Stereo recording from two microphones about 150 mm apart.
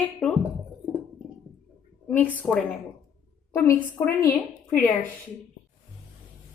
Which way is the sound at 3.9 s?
15° left (ahead or behind).